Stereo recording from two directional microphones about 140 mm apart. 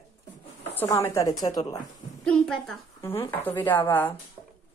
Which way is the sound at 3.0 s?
20° left (ahead or behind).